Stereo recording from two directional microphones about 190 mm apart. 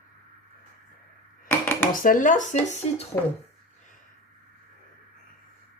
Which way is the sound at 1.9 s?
45° left (ahead or behind).